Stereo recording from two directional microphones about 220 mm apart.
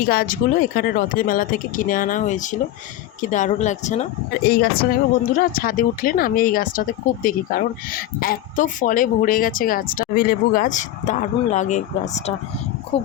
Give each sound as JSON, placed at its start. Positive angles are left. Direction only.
{"t": 0.1, "sound": "speech", "side_deg": 40}
{"t": 4.4, "sound": "speech", "side_deg": 45}